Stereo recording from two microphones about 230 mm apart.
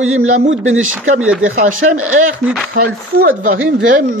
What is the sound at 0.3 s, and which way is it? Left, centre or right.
Speech, right.